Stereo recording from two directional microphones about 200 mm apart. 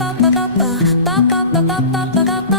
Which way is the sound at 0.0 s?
Centre (ahead or behind).